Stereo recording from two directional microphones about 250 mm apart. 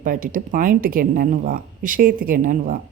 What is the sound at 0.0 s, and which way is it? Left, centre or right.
Speech, right.